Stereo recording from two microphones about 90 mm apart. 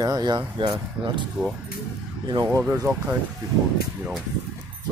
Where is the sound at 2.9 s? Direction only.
50° right (ahead or behind).